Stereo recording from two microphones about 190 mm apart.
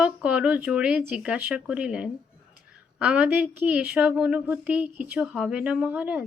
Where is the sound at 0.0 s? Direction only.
5° right (ahead or behind).